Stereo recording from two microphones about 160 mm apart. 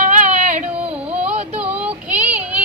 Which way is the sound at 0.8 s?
10° right (ahead or behind).